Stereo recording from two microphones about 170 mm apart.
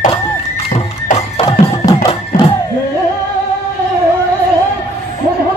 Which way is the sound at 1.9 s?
25° left (ahead or behind).